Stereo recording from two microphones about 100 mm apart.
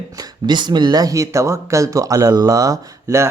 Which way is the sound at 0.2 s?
45° right (ahead or behind).